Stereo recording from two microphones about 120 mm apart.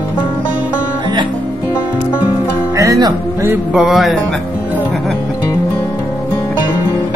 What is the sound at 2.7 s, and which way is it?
Music, 30° right (ahead or behind).